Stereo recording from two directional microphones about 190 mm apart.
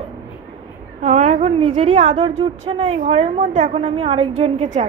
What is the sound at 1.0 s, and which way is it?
A woman's voice, 35° right (ahead or behind).